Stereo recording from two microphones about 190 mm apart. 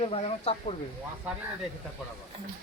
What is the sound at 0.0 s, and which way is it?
Speech, 30° left (ahead or behind).